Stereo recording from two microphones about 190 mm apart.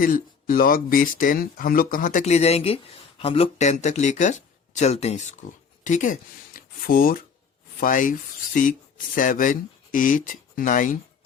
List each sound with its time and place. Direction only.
0.0 s speech: 45° left (ahead or behind)
9.1 s speech: 45° left (ahead or behind)